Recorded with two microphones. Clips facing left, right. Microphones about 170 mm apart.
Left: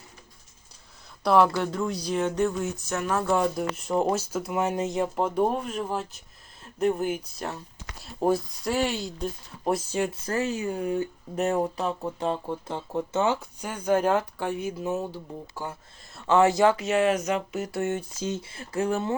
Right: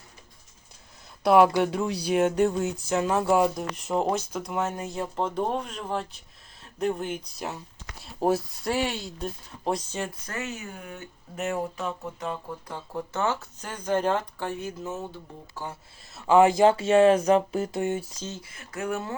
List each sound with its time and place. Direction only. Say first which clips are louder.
1.2 s speech: right 2 dB; 5° right (ahead or behind)
1.5 s speech: right 2 dB; 15° right (ahead or behind)
1.9 s speech: right 2 dB; 65° right (ahead or behind)
2.4 s speech: right 2 dB; 25° right (ahead or behind)
3.3 s speech: right 2 dB; 5° right (ahead or behind)
4.6 s speech: left 4 dB; 15° left (ahead or behind)
5.2 s speech: left 1 dB; 10° left (ahead or behind)
10.2 s speech: left 8 dB; 30° left (ahead or behind); by 15.7 s 10° left (ahead or behind)
16.1 s speech: right 2 dB; 10° right (ahead or behind)
16.6 s speech: right 4 dB; 30° right (ahead or behind)
17.7 s speech: even; 15° right (ahead or behind)
18.2 s speech: left 7 dB; 15° left (ahead or behind)
18.4 s speech: left 2 dB; 30° left (ahead or behind)